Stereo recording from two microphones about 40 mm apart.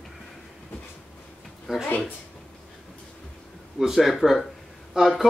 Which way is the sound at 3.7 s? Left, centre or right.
Centre.